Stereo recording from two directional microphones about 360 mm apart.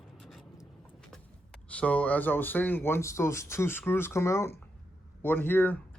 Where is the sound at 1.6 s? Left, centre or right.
Centre.